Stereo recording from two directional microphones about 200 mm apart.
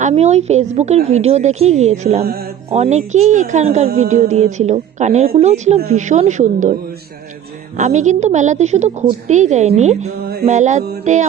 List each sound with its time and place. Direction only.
0.0 s a woman's voice: 35° right (ahead or behind)
7.8 s a woman's voice: 35° right (ahead or behind)